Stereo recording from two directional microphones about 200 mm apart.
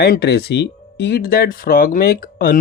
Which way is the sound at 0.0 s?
55° left (ahead or behind).